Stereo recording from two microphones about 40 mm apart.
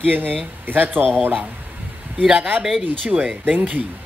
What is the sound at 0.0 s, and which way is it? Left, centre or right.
A woman's voice, right.